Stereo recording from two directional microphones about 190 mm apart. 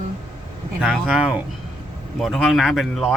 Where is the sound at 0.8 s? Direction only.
5° right (ahead or behind).